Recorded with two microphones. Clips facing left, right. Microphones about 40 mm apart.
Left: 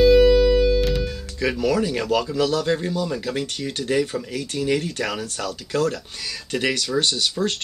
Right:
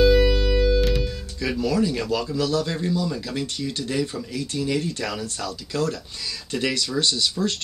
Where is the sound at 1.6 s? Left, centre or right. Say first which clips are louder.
Even; left.